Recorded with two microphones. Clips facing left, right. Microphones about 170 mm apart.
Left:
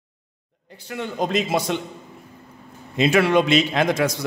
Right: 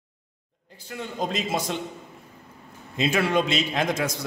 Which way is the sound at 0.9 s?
70° left (ahead or behind).